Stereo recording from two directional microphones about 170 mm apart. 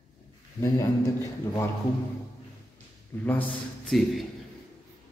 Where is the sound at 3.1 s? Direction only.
15° left (ahead or behind).